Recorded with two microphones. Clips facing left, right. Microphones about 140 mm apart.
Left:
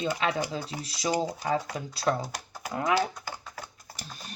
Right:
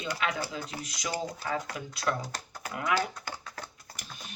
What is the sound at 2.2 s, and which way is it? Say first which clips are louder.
Speech: left 3 dB; 10° left (ahead or behind).